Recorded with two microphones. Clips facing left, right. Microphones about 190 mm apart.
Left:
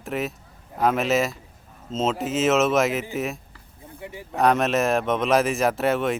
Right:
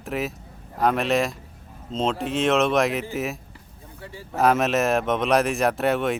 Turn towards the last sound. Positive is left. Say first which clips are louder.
# even
turn(degrees=0)  # may be behind; listen again after turning